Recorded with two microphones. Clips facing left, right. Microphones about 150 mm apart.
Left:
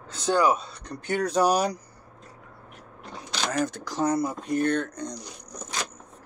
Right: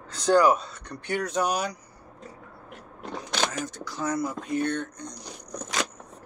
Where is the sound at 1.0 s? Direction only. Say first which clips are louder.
Left 4 dB; 40° left (ahead or behind).